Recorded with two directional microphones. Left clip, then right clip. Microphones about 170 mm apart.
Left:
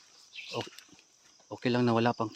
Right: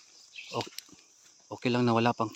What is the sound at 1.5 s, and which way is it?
Speech, 15° right (ahead or behind).